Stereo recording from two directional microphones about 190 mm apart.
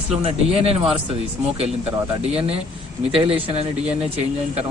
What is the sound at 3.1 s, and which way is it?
Speech, 30° right (ahead or behind).